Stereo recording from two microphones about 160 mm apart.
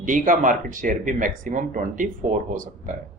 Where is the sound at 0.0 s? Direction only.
55° right (ahead or behind).